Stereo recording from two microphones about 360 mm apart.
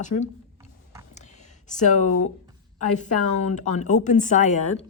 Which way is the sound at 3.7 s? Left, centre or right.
Centre.